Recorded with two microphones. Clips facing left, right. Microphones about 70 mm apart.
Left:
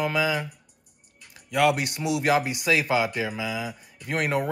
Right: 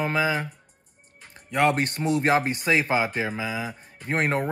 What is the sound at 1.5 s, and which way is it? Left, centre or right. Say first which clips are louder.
Speech: even; right.